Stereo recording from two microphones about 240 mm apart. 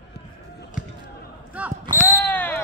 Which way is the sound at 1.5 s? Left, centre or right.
Centre.